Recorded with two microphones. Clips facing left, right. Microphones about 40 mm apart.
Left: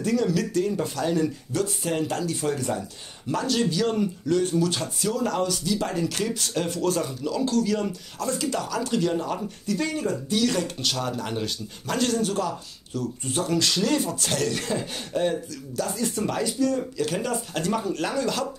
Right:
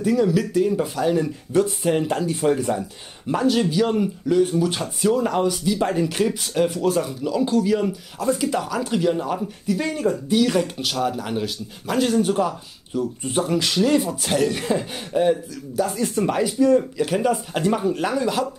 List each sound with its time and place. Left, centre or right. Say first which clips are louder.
0.0 s speech: right 4 dB; centre